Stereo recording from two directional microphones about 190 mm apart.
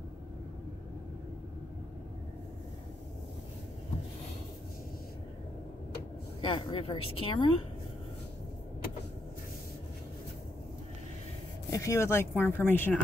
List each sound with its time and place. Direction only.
6.4 s speech: 30° left (ahead or behind)
11.7 s speech: 15° left (ahead or behind)